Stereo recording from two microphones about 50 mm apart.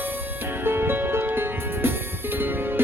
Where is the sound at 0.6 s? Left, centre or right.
Right.